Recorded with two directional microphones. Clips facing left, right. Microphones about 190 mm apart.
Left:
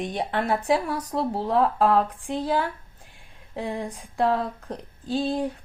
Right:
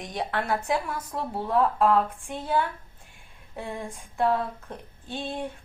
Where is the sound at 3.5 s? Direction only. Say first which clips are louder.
Left 5 dB; 35° left (ahead or behind).